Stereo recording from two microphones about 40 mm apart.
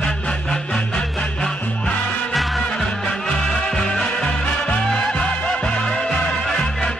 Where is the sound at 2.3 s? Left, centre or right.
Centre.